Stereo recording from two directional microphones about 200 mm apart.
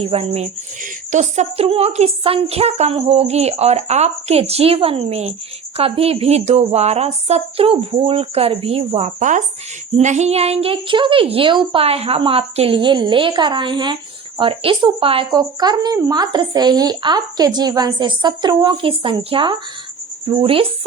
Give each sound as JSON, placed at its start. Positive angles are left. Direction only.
{"t": 0.0, "sound": "speech", "side_deg": -30}